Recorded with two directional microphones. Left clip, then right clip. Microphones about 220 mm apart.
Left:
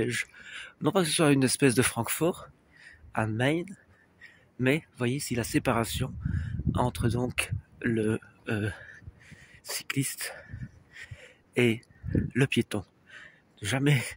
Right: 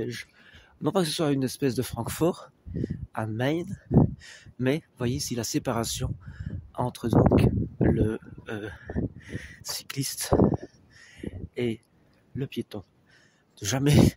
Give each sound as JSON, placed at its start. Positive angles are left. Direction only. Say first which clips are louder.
{"t": 0.0, "sound": "speech", "louder": "left 4 dB", "side_deg": -5}
{"t": 1.2, "sound": "speech", "louder": "left 3 dB", "side_deg": 0}
{"t": 2.1, "sound": "speech", "louder": "right 6 dB", "side_deg": -15}
{"t": 2.8, "sound": "speech", "louder": "left 1 dB", "side_deg": 0}
{"t": 11.1, "sound": "a sound", "louder": "left 5 dB", "side_deg": 0}
{"t": 12.4, "sound": "speech", "louder": "left 6 dB", "side_deg": 5}
{"t": 13.6, "sound": "speech", "louder": "right 1 dB", "side_deg": -15}